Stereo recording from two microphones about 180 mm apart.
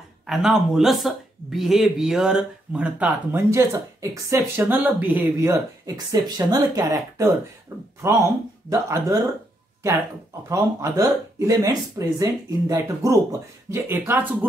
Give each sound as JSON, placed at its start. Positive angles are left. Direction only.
{"t": 0.3, "sound": "speech", "side_deg": 0}
{"t": 10.5, "sound": "speech", "side_deg": -20}